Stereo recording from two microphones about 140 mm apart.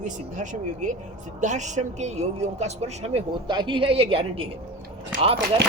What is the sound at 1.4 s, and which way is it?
A man's voice, 60° right (ahead or behind).